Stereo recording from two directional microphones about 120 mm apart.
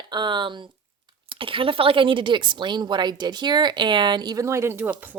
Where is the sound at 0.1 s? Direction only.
40° right (ahead or behind).